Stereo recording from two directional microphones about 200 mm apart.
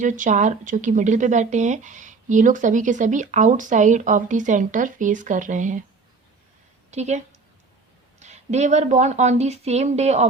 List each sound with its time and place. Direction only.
0.0 s speech: 40° right (ahead or behind)
6.9 s speech: 35° right (ahead or behind)
8.2 s speech: 35° right (ahead or behind)